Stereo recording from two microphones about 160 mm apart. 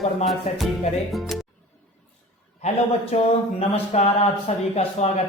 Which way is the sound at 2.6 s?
40° left (ahead or behind).